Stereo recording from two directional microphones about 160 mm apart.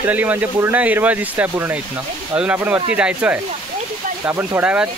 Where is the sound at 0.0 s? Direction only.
10° right (ahead or behind).